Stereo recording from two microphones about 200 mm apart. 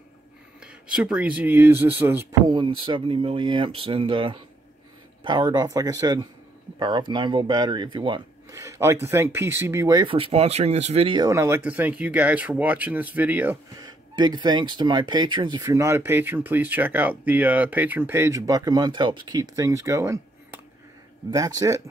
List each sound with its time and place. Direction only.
0.6 s speech: 5° right (ahead or behind)
2.5 s speech: 25° right (ahead or behind)